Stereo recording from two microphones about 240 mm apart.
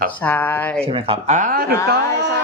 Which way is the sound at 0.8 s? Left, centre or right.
Right.